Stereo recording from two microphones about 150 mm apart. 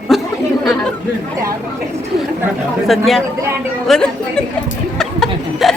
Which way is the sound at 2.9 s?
Centre (ahead or behind).